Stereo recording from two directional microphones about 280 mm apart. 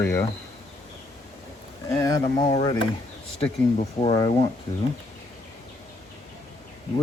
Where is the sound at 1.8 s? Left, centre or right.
Centre.